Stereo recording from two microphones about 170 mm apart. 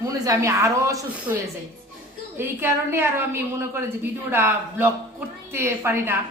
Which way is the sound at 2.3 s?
15° right (ahead or behind).